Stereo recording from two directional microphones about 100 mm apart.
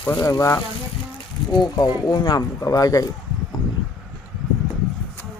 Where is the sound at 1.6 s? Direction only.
40° left (ahead or behind).